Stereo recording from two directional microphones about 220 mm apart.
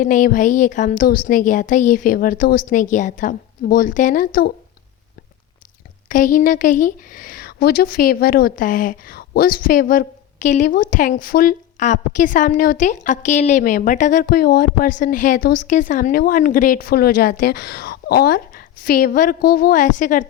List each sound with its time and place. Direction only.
0.0 s a woman's voice: 35° left (ahead or behind)
6.1 s a woman's voice: 40° left (ahead or behind)